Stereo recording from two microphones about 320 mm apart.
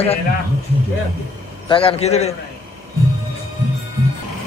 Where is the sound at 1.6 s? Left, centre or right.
Centre.